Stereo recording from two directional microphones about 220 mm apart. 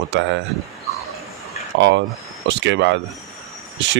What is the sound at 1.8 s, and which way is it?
Speech, 55° right (ahead or behind).